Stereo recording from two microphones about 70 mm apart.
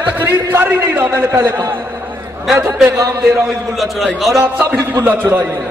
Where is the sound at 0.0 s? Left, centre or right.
Right.